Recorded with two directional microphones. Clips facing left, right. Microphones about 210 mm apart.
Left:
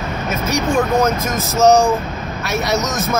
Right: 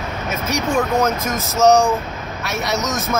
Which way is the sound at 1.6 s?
5° left (ahead or behind).